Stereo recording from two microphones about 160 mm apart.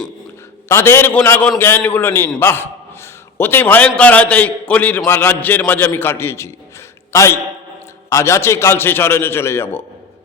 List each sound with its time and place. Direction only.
0.7 s a man's voice: 15° left (ahead or behind)